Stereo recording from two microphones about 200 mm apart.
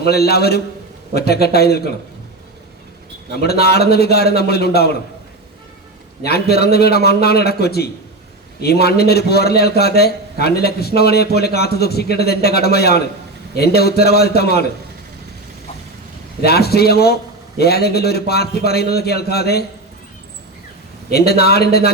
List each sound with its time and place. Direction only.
0.0 s a man's voice: 50° left (ahead or behind)
3.4 s a man's voice: 50° left (ahead or behind)
6.2 s a man's voice: 55° left (ahead or behind)
16.4 s a man's voice: 50° left (ahead or behind)
21.1 s a man's voice: 50° left (ahead or behind)